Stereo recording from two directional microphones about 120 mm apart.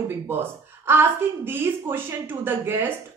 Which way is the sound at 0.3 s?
20° right (ahead or behind).